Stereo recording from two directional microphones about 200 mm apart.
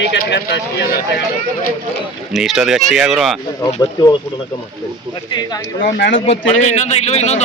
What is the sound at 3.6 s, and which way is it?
Speech, 20° left (ahead or behind).